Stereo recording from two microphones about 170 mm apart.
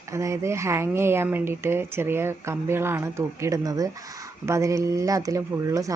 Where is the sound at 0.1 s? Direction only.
15° right (ahead or behind).